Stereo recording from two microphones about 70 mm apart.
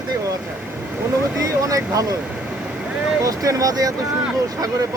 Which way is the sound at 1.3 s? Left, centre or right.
Right.